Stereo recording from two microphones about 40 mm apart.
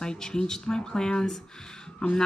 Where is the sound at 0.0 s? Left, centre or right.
Centre.